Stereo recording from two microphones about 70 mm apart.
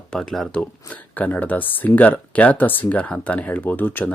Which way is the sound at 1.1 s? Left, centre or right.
Left.